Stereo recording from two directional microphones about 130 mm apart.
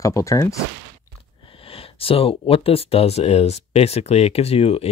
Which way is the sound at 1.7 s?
45° left (ahead or behind).